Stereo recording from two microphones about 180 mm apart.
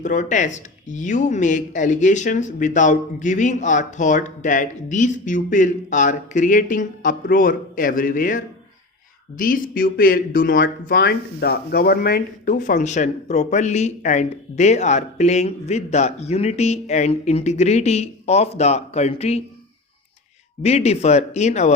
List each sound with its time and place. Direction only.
0.0 s speech: 45° left (ahead or behind)
20.6 s speech: 35° left (ahead or behind)